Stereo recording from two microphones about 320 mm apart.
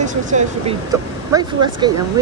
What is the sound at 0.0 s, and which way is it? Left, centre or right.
Speech, right.